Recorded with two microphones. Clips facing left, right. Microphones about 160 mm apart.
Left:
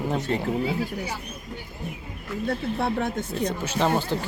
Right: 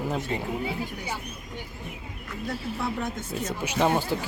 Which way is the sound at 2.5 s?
60° left (ahead or behind).